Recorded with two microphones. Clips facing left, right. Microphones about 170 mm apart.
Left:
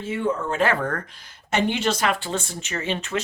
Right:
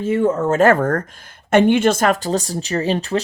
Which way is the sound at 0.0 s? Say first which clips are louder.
Right 8 dB; 45° right (ahead or behind).